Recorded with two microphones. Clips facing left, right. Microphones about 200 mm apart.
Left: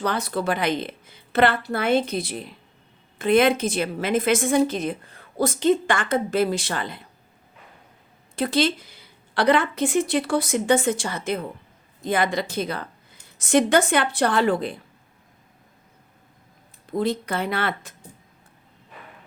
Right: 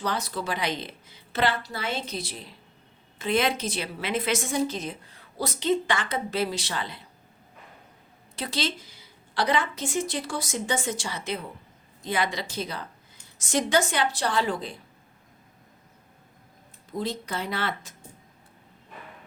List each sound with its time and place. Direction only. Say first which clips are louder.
0.0 s a woman's voice: left 5 dB; 60° left (ahead or behind)
8.4 s a woman's voice: left 9 dB; 55° left (ahead or behind)
17.0 s a woman's voice: left 6 dB; 60° left (ahead or behind)